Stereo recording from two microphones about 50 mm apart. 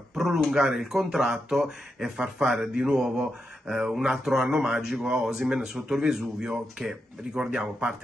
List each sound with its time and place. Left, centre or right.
0.1 s a sound: centre
0.5 s speech: centre
7.3 s speech: centre